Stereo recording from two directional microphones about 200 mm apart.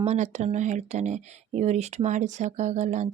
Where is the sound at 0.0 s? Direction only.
35° right (ahead or behind).